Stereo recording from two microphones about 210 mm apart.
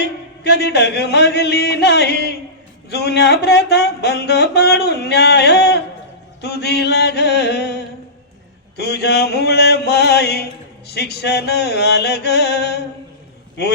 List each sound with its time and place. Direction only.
0.0 s mantra: 50° left (ahead or behind)